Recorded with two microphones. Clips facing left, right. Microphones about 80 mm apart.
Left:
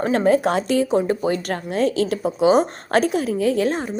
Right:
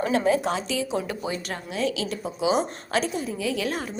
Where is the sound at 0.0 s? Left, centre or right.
Left.